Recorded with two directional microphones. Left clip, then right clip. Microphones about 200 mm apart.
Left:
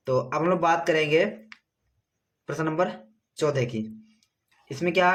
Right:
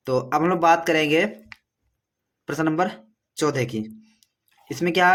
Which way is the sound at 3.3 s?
40° right (ahead or behind).